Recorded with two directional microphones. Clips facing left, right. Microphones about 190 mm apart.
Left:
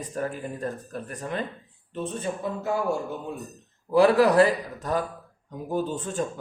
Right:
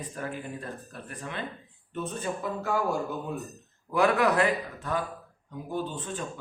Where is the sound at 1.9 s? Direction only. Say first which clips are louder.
Left 2 dB; 25° left (ahead or behind); by 6.2 s 45° left (ahead or behind).